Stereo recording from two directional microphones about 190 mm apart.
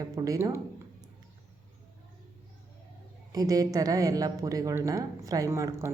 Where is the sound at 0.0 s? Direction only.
20° right (ahead or behind).